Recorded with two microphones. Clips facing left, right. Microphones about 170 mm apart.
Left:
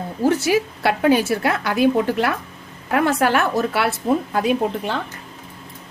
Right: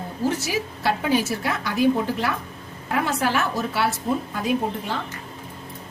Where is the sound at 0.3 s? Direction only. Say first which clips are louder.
Left 8 dB; 60° left (ahead or behind).